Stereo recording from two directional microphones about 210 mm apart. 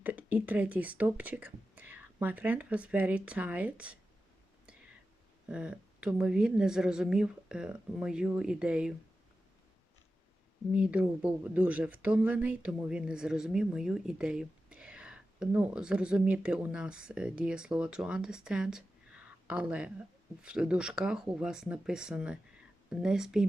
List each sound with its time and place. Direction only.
0.0 s speech: 10° right (ahead or behind)
5.5 s speech: 5° right (ahead or behind)
10.7 s speech: 5° right (ahead or behind)